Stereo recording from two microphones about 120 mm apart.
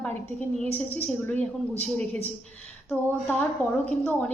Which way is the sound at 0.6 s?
15° left (ahead or behind).